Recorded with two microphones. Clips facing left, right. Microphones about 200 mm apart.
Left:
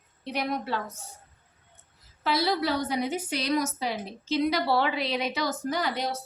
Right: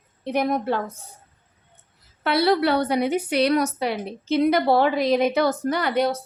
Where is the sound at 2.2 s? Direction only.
65° right (ahead or behind).